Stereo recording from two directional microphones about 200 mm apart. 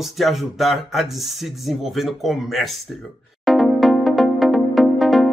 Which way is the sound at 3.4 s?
Centre (ahead or behind).